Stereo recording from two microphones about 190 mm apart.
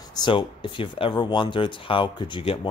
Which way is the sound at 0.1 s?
25° left (ahead or behind).